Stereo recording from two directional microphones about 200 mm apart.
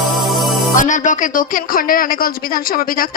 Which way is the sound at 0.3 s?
Centre (ahead or behind).